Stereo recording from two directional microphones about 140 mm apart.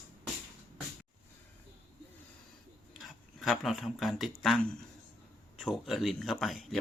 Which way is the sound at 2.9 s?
Centre (ahead or behind).